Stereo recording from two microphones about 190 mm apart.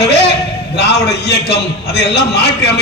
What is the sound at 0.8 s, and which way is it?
A man's voice, 60° left (ahead or behind).